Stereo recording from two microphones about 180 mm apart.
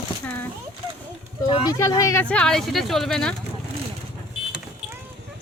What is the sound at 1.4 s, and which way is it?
Speech, 20° left (ahead or behind).